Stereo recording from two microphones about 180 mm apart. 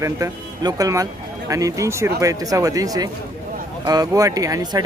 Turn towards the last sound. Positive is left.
turn(degrees=-20)  # may be behind; listen again after turning